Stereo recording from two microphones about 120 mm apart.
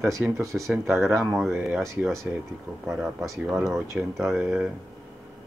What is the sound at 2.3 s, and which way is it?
Speech, 10° right (ahead or behind).